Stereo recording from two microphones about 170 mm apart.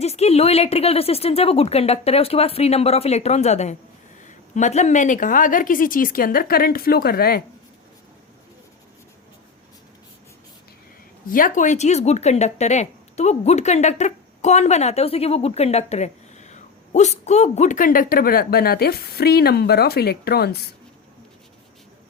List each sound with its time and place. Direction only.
0.0 s speech: 40° left (ahead or behind); by 7.4 s 60° left (ahead or behind)
11.3 s speech: 55° left (ahead or behind); by 20.6 s 70° left (ahead or behind)